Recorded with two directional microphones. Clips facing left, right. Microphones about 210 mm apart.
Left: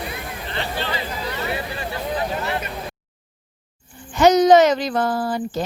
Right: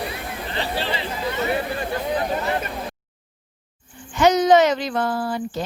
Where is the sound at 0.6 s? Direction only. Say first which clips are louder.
Right 1 dB; 35° right (ahead or behind).